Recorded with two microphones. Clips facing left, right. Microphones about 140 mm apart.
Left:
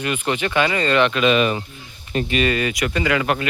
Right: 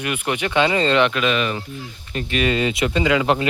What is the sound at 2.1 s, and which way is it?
Speech, 25° left (ahead or behind).